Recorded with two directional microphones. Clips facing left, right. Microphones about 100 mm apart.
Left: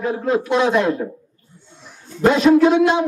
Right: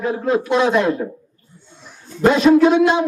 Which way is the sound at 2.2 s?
20° right (ahead or behind).